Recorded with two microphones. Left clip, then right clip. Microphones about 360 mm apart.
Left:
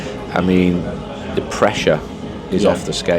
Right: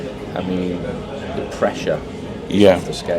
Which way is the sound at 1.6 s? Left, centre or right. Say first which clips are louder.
Left 5 dB; left.